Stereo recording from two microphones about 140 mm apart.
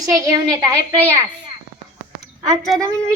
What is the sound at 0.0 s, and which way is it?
A woman's voice, 25° right (ahead or behind).